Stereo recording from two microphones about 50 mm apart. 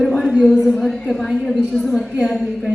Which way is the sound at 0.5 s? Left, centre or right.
Centre.